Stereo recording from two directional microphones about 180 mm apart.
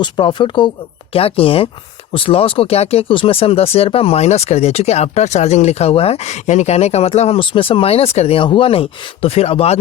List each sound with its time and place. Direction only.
0.0 s speech: 25° left (ahead or behind)